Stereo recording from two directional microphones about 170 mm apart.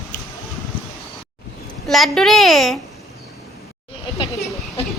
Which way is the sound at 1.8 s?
Centre (ahead or behind).